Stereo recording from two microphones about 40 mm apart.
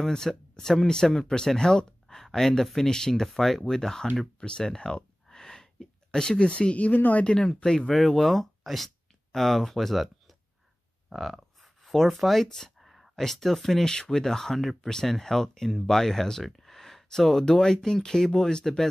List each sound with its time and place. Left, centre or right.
0.0 s speech: centre; by 7.2 s left
7.2 s speech: centre
8.0 s speech: centre
11.1 s grunt: centre
12.4 s speech: centre
12.7 s a sound: centre
13.2 s speech: centre